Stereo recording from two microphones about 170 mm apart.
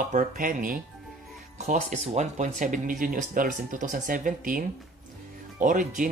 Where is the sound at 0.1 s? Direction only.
50° right (ahead or behind).